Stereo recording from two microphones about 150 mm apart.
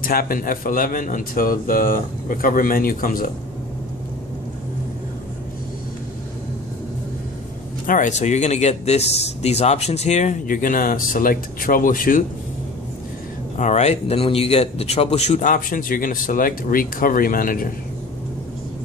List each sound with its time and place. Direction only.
0.0 s speech: 75° left (ahead or behind)
7.8 s a man's voice: 60° left (ahead or behind)
13.6 s a man's voice: 50° left (ahead or behind); by 17.7 s 65° left (ahead or behind)